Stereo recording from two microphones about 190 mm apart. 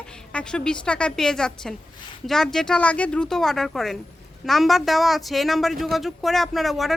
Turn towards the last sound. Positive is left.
turn(degrees=0)  # may be behind; listen again after turning